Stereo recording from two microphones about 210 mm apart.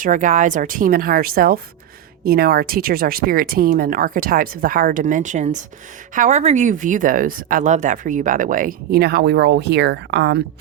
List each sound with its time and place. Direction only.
0.0 s speech: 40° right (ahead or behind); by 10.4 s 55° right (ahead or behind)